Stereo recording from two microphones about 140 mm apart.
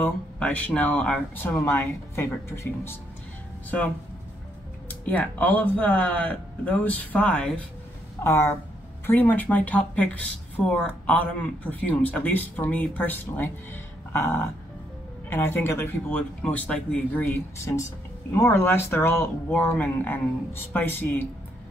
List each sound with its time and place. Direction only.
0.0 s speech: 10° left (ahead or behind)
5.0 s speech: 10° left (ahead or behind)
8.2 s speech: 20° left (ahead or behind)
15.2 s speech: 15° left (ahead or behind)